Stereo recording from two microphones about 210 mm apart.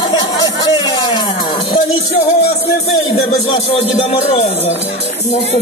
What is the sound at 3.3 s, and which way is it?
Speech, 30° left (ahead or behind).